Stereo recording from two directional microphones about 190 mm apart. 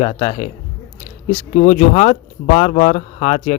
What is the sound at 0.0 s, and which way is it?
Speech, 30° left (ahead or behind).